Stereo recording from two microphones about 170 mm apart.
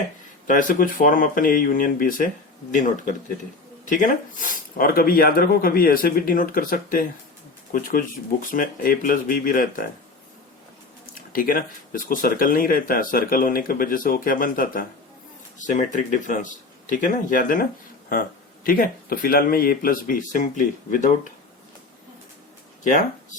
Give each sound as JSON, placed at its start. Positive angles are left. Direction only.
{"t": 0.4, "sound": "speech", "side_deg": 55}
{"t": 11.3, "sound": "speech", "side_deg": 55}
{"t": 22.8, "sound": "speech", "side_deg": 50}